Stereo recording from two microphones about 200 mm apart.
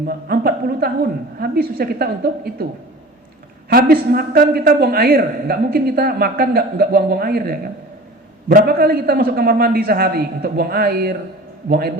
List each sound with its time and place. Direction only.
0.0 s a man's voice: 45° right (ahead or behind)
3.7 s a man's voice: 50° right (ahead or behind)